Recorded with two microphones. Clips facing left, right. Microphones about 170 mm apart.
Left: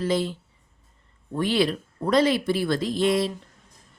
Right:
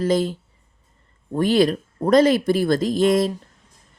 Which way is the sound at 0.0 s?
45° right (ahead or behind).